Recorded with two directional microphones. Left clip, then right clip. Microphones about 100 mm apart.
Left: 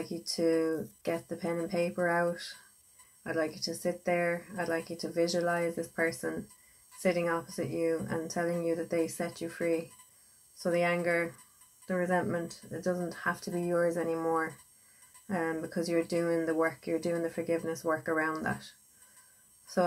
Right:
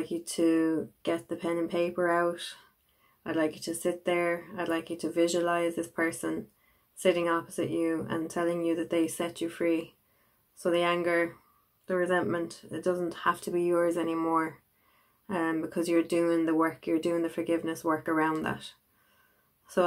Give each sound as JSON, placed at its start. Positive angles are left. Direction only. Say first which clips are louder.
{"t": 0.4, "sound": "speech", "louder": "right 2 dB", "side_deg": -20}
{"t": 3.3, "sound": "speech", "louder": "right 3 dB", "side_deg": -20}
{"t": 10.6, "sound": "speech", "louder": "right 2 dB", "side_deg": -15}
{"t": 13.9, "sound": "speech", "louder": "right 2 dB", "side_deg": -30}